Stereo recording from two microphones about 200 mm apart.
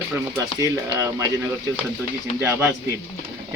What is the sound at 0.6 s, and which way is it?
Speech, 15° right (ahead or behind).